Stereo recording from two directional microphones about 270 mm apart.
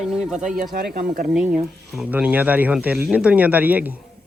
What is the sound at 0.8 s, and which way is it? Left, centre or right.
Speech, right.